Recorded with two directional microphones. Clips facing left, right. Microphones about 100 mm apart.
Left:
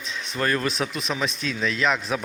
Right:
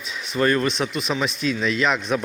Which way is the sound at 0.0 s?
5° right (ahead or behind).